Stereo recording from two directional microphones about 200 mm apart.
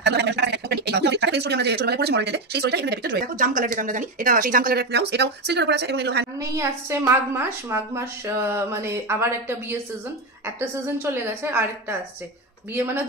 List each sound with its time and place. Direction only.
0.0 s speech: 55° right (ahead or behind)
6.4 s a woman's voice: 15° right (ahead or behind)